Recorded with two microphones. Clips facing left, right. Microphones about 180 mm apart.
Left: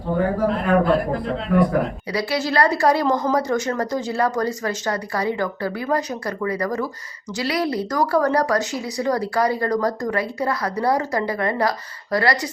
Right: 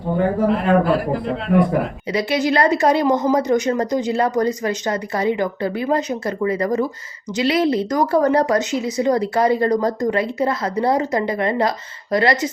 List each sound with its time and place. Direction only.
0.4 s speech: 5° right (ahead or behind)
2.1 s speech: 20° right (ahead or behind)